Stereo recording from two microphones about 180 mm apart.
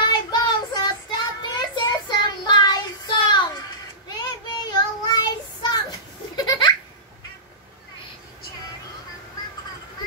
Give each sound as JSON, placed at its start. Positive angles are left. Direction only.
{"t": 0.0, "sound": "child singing", "side_deg": 25}